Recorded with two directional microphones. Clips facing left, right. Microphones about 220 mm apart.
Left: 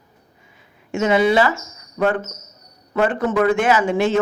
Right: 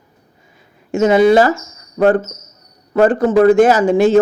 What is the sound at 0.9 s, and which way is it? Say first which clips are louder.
A woman's voice: right 6 dB; 40° right (ahead or behind).